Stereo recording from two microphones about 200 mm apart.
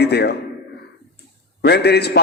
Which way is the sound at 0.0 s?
55° left (ahead or behind).